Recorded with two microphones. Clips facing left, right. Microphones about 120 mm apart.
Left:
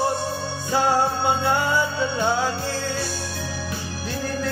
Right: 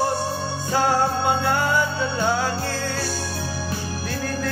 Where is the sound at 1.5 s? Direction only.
20° left (ahead or behind).